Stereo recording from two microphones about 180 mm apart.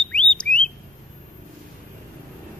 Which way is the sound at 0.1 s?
5° left (ahead or behind).